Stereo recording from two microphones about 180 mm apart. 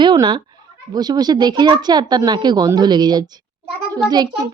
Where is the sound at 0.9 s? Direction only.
20° right (ahead or behind).